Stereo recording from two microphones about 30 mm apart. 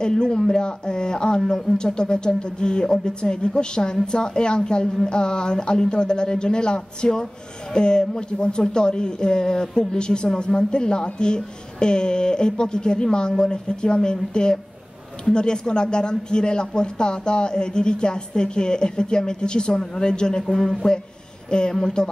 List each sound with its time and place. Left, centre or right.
0.0 s a man's voice: left
20.4 s speech: centre
21.5 s a woman's voice: left